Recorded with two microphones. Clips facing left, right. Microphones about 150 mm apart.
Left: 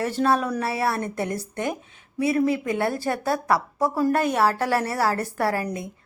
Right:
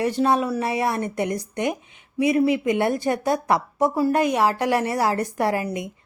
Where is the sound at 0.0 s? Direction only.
15° right (ahead or behind).